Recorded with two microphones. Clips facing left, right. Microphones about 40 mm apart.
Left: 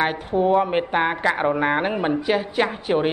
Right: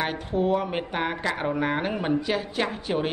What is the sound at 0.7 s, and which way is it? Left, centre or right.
Speech, left.